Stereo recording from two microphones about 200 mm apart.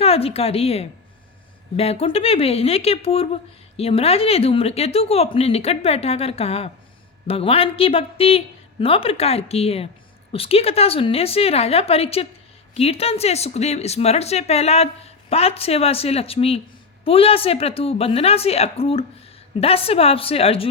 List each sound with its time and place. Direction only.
0.0 s a woman's voice: 30° left (ahead or behind)